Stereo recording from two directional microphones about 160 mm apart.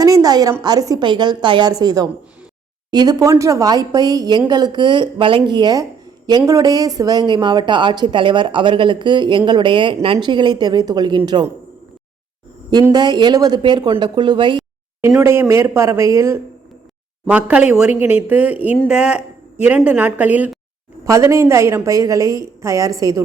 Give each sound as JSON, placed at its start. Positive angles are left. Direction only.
{"t": 0.0, "sound": "a sound", "side_deg": -20}
{"t": 0.6, "sound": "speech", "side_deg": -25}
{"t": 12.9, "sound": "speech", "side_deg": -25}
{"t": 15.2, "sound": "speech", "side_deg": -15}